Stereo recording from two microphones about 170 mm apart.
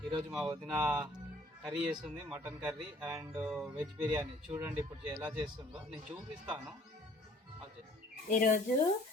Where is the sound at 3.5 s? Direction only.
5° right (ahead or behind).